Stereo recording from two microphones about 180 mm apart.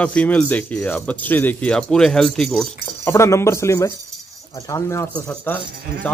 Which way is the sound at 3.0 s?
15° left (ahead or behind).